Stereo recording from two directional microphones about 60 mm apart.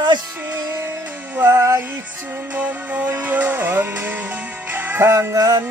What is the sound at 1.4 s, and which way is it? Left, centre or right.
Music, right.